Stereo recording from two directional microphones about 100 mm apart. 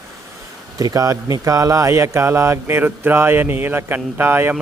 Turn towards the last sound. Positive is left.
turn(degrees=-20)  # may be behind; listen again after turning